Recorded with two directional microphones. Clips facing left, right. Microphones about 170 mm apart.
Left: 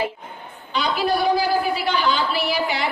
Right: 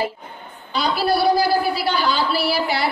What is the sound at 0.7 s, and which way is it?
A woman's voice, 35° right (ahead or behind).